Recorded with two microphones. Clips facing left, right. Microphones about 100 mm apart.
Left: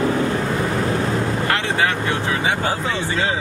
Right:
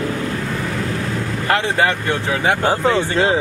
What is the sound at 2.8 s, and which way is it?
Speech, 60° right (ahead or behind).